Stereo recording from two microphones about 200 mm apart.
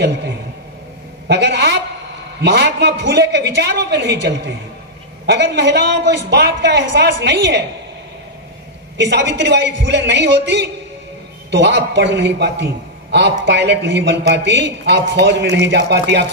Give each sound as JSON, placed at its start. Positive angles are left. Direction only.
{"t": 1.2, "sound": "a woman's voice", "side_deg": -55}
{"t": 8.9, "sound": "a man's voice", "side_deg": -60}